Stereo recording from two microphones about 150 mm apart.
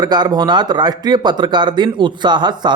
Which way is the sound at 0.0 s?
25° right (ahead or behind).